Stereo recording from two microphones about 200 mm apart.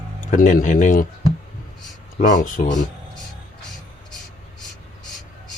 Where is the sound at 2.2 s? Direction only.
40° left (ahead or behind).